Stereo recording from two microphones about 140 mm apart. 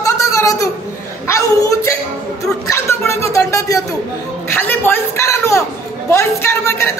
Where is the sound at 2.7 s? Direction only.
20° left (ahead or behind).